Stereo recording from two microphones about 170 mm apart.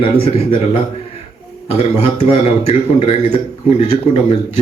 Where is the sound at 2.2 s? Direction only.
35° left (ahead or behind).